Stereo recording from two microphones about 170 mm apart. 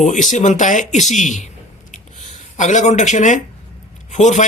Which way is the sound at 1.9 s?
45° left (ahead or behind).